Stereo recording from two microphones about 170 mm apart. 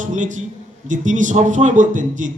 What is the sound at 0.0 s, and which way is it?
A man's voice, 50° right (ahead or behind).